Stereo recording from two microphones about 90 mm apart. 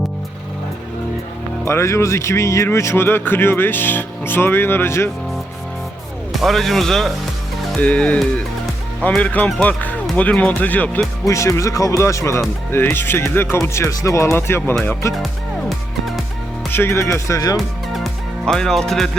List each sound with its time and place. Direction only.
1.6 s speech: 30° left (ahead or behind)
6.4 s speech: centre (ahead or behind)
7.8 s speech: 15° left (ahead or behind)
11.3 s speech: 35° left (ahead or behind)
16.7 s speech: 30° left (ahead or behind)
17.9 s music: 5° left (ahead or behind)